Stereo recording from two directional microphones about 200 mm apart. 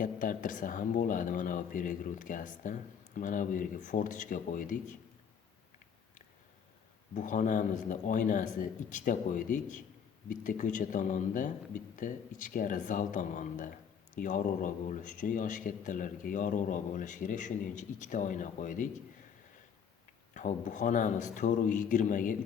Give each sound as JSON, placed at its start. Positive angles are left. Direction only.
{"t": 0.0, "sound": "speech", "side_deg": 40}
{"t": 7.1, "sound": "speech", "side_deg": 40}
{"t": 20.3, "sound": "speech", "side_deg": 40}